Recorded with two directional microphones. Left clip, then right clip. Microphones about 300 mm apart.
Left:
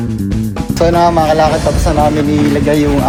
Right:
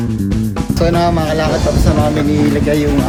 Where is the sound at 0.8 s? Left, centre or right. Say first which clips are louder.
Left 5 dB; centre.